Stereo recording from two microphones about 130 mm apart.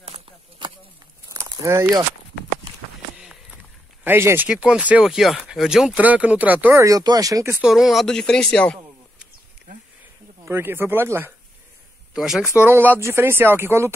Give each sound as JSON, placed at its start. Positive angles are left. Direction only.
{"t": 1.3, "sound": "walk", "side_deg": -25}
{"t": 4.0, "sound": "speech", "side_deg": -15}
{"t": 7.5, "sound": "speech", "side_deg": -5}
{"t": 10.4, "sound": "speech", "side_deg": -20}
{"t": 12.1, "sound": "speech", "side_deg": -5}
{"t": 12.5, "sound": "speech", "side_deg": -15}